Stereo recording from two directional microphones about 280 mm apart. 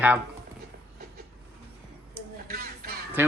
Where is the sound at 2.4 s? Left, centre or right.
Right.